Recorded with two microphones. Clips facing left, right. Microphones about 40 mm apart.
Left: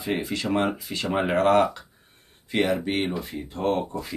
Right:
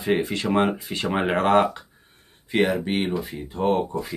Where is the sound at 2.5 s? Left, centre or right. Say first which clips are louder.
Right 2 dB; centre.